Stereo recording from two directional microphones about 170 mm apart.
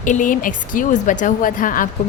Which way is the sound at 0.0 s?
50° left (ahead or behind).